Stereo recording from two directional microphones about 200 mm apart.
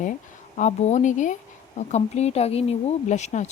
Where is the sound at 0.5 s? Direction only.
35° left (ahead or behind).